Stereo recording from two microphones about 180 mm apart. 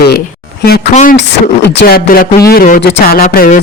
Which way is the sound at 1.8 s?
60° left (ahead or behind).